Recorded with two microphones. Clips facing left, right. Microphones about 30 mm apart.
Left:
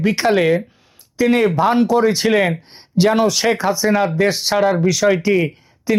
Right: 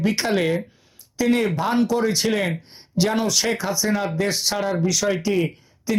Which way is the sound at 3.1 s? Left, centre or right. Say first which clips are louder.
Left 6 dB; centre.